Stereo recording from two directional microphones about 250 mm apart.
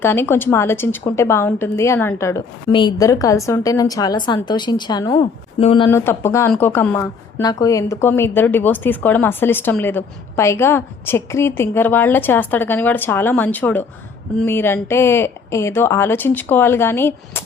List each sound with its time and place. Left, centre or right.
0.0 s a woman's voice: centre
6.1 s a woman's voice: centre